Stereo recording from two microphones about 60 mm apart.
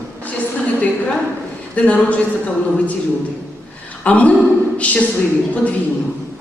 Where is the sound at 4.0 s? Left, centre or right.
Left.